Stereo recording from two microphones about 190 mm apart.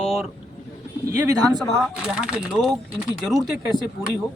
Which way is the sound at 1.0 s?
15° right (ahead or behind).